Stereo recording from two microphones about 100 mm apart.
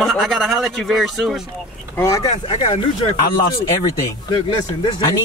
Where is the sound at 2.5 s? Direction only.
60° left (ahead or behind).